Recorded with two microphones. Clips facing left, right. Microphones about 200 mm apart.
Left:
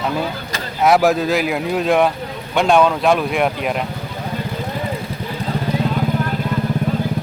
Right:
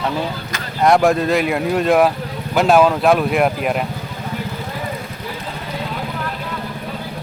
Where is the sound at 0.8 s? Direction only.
5° left (ahead or behind).